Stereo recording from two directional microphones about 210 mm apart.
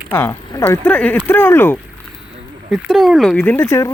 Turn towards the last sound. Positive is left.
turn(degrees=15)  # may be behind; listen again after turning